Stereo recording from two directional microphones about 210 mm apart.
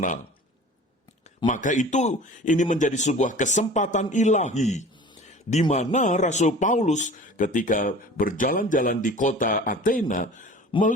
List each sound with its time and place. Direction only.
1.5 s speech: 35° left (ahead or behind)
10.7 s speech: 25° left (ahead or behind)